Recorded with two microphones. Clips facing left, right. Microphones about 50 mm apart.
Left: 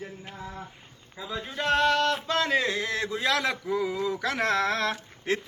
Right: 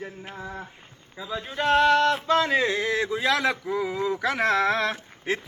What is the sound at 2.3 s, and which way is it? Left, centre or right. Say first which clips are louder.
Speech: right 4 dB; centre.